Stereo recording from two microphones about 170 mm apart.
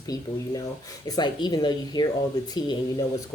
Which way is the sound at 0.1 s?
20° left (ahead or behind).